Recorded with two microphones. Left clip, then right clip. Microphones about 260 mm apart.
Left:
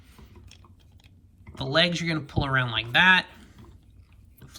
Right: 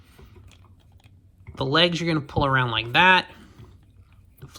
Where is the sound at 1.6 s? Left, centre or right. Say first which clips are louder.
Right 3 dB; centre.